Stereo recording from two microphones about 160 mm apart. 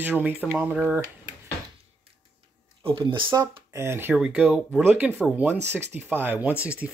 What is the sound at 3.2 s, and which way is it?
Speech, 15° right (ahead or behind).